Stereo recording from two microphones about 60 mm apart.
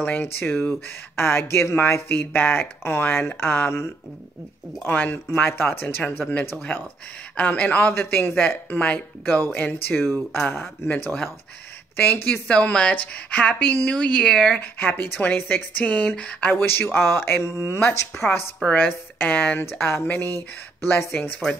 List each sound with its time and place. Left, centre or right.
0.0 s speech: left
4.7 s speech: left
7.3 s speech: left
7.9 s speech: left
12.0 s speech: left
12.4 s speech: centre
13.8 s speech: centre
14.6 s speech: left
16.5 s speech: left
18.8 s speech: left
19.6 s speech: left